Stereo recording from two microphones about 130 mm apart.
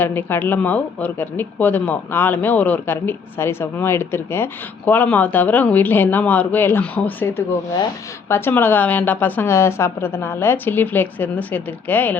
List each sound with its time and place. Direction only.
0.0 s speech: 15° left (ahead or behind)